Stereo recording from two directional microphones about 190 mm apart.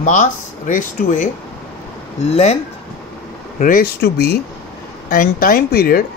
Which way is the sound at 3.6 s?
50° left (ahead or behind).